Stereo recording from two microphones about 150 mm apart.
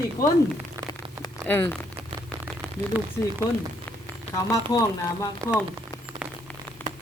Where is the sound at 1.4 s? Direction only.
15° left (ahead or behind).